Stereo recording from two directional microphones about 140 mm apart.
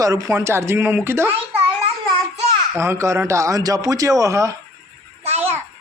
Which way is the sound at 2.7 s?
20° right (ahead or behind).